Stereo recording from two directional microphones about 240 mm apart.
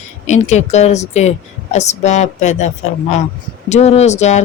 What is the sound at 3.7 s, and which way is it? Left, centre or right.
Speech, left.